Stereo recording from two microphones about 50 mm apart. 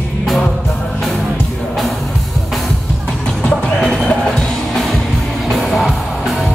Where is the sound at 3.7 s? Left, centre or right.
Centre.